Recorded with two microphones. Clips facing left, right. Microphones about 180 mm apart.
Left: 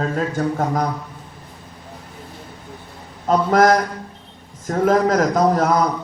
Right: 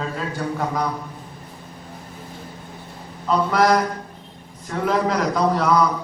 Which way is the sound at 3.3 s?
45° left (ahead or behind).